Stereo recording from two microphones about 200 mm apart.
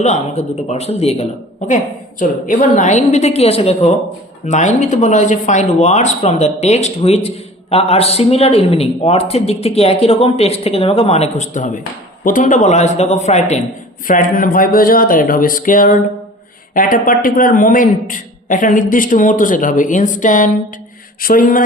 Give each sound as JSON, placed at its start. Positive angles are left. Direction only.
{"t": 0.0, "sound": "speech", "side_deg": 35}